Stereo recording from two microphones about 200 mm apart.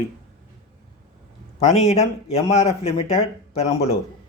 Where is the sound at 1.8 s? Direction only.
30° left (ahead or behind).